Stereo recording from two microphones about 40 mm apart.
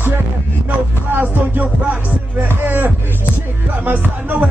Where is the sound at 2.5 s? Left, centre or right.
Right.